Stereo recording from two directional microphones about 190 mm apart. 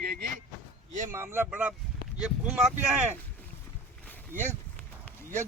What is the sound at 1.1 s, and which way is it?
Speech, 10° right (ahead or behind).